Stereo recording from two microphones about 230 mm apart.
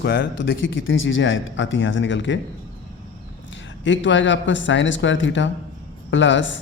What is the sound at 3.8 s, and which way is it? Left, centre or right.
Speech, left.